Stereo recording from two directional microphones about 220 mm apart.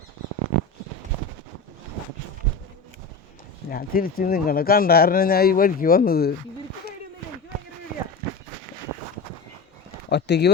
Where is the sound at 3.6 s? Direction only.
40° left (ahead or behind).